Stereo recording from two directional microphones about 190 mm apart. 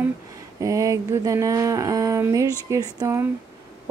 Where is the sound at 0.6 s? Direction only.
15° right (ahead or behind).